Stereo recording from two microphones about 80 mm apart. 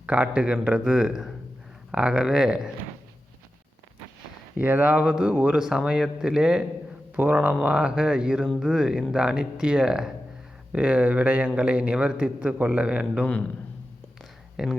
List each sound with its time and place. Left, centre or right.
0.0 s a man's voice: centre
4.5 s speech: right
5.5 s a man's voice: centre
7.2 s speech: right
7.6 s a man's voice: centre
14.2 s a sound: centre